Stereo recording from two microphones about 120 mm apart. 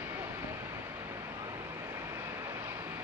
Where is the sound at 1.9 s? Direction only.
20° right (ahead or behind).